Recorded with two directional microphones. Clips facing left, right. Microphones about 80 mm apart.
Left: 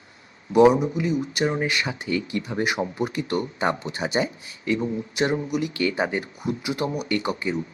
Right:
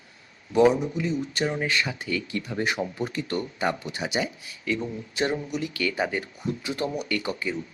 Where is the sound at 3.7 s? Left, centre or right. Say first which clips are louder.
Left 3 dB; left.